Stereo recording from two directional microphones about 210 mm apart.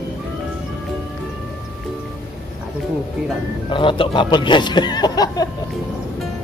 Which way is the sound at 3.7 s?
25° left (ahead or behind).